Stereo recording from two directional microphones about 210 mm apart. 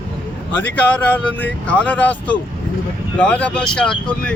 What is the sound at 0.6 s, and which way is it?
Speech, 10° left (ahead or behind).